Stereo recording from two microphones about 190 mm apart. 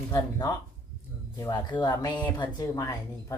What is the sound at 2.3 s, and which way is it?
Speech, 20° left (ahead or behind).